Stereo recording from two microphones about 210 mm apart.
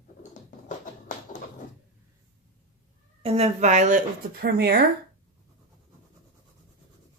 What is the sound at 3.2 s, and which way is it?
Speech, 30° right (ahead or behind).